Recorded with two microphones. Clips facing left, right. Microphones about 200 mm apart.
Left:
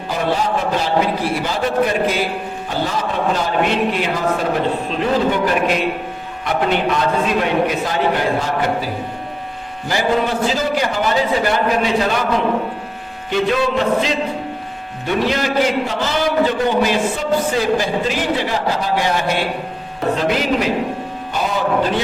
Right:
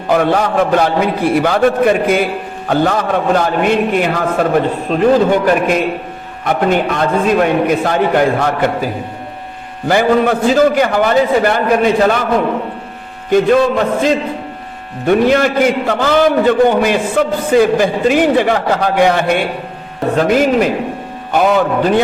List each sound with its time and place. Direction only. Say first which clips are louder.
0.1 s a man's voice: right 6 dB; 60° right (ahead or behind)
9.9 s a man's voice: right 6 dB; 55° right (ahead or behind)
13.3 s a man's voice: right 7 dB; 50° right (ahead or behind)
21.3 s a man's voice: right 6 dB; 60° right (ahead or behind)